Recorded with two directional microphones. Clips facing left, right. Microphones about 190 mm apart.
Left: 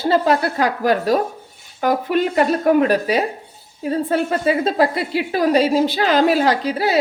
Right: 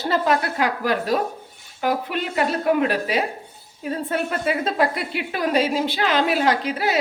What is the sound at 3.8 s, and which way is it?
A woman's voice, 30° left (ahead or behind).